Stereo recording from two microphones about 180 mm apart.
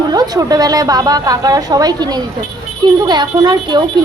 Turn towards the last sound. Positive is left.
turn(degrees=-25)  # may be behind; listen again after turning